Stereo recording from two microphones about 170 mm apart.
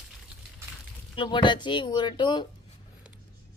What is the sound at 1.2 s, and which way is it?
Speech, 30° left (ahead or behind).